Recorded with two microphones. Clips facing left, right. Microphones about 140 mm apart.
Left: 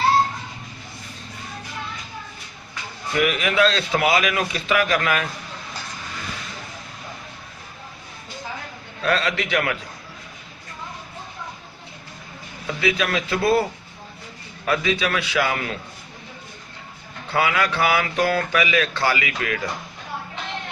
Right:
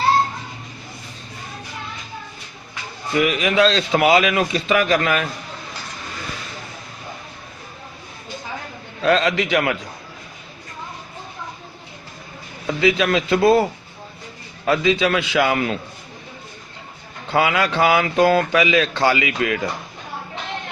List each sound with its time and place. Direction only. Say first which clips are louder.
3.1 s speech: right 3 dB; 20° right (ahead or behind)
9.0 s speech: right 5 dB; 25° right (ahead or behind)
12.6 s speech: right 5 dB; 25° right (ahead or behind)
14.6 s speech: right 5 dB; 25° right (ahead or behind)
17.3 s speech: right 3 dB; 25° right (ahead or behind)